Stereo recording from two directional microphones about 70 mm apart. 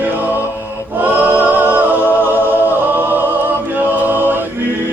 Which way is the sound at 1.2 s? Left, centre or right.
Right.